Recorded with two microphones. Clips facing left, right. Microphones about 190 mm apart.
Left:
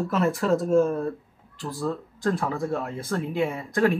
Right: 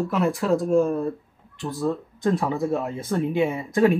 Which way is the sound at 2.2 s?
20° right (ahead or behind).